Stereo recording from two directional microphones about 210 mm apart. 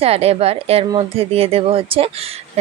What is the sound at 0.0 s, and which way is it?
Speech, 30° right (ahead or behind).